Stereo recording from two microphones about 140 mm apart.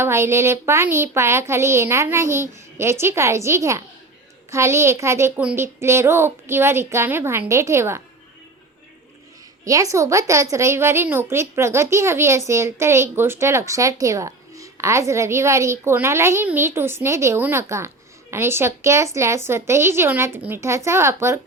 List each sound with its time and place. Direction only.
0.0 s a woman's voice: 20° right (ahead or behind)
9.6 s a woman's voice: 25° right (ahead or behind)